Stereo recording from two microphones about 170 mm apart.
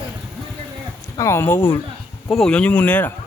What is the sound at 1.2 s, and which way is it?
Speech, 15° left (ahead or behind).